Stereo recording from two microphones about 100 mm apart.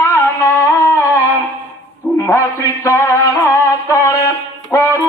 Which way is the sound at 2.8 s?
30° left (ahead or behind).